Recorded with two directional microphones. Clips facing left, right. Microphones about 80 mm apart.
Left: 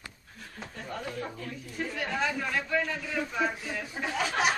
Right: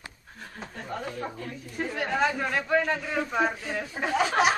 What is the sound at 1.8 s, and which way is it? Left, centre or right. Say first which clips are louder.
A man's voice: right 5 dB; right.